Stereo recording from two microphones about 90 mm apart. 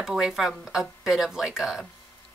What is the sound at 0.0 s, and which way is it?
A woman's voice, 5° right (ahead or behind).